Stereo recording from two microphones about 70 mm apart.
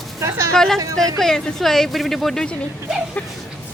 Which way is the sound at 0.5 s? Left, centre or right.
Centre.